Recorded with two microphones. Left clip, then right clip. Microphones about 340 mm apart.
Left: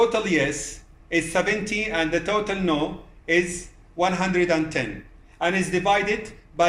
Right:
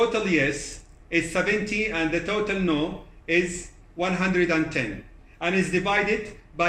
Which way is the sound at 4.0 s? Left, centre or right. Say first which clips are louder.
Left 2 dB; left.